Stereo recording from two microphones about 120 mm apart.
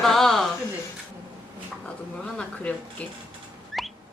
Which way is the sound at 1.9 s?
10° left (ahead or behind).